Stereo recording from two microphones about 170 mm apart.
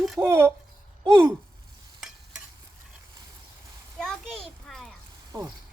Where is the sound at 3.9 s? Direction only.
5° left (ahead or behind).